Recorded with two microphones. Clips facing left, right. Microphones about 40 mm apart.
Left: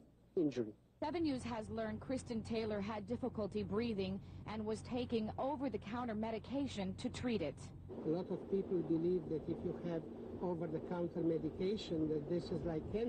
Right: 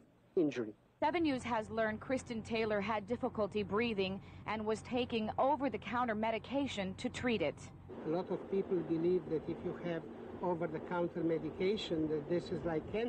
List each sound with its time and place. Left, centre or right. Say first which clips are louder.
0.4 s a woman's voice: right 3 dB; right